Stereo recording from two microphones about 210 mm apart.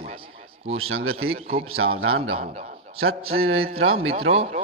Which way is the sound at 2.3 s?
35° right (ahead or behind).